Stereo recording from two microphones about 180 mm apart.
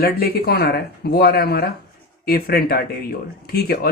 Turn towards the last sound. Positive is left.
turn(degrees=60)  # may be behind; listen again after turning